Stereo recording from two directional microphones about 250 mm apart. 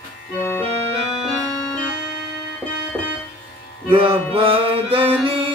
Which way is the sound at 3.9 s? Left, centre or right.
Right.